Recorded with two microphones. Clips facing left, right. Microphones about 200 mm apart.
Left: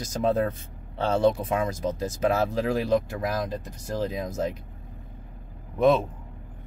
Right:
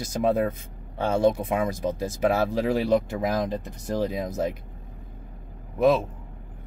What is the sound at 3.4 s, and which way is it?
Speech, 15° right (ahead or behind).